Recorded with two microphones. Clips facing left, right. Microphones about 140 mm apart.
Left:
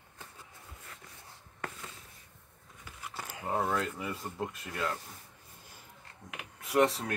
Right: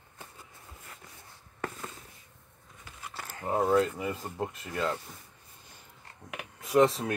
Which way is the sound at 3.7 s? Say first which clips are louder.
Right 7 dB; 30° right (ahead or behind).